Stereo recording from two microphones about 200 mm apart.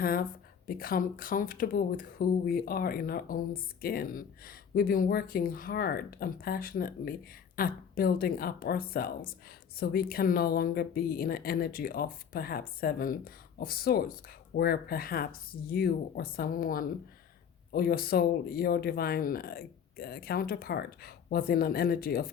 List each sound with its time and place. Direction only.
0.0 s speech: 45° left (ahead or behind)